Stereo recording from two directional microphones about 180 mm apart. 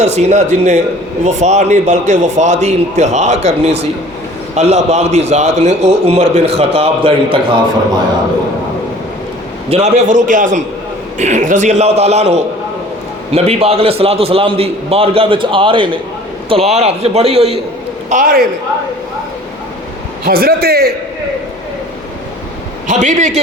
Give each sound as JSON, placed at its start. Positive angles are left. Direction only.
{"t": 0.0, "sound": "a man's voice", "side_deg": -40}
{"t": 9.6, "sound": "a man's voice", "side_deg": -40}
{"t": 18.1, "sound": "a man's voice", "side_deg": -50}
{"t": 20.2, "sound": "a man's voice", "side_deg": -60}
{"t": 22.9, "sound": "a man's voice", "side_deg": -40}